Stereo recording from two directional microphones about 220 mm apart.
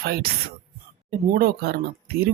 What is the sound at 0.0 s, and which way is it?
Speech, 45° right (ahead or behind).